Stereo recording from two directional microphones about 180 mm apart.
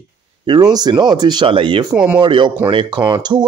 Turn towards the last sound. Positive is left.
turn(degrees=-25)  # may be behind; listen again after turning